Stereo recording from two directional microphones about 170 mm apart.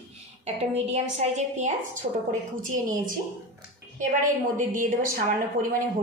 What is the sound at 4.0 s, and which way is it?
A woman's voice, 50° right (ahead or behind).